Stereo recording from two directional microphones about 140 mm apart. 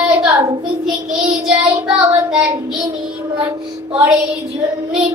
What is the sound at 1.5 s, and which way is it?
Child singing, 10° right (ahead or behind).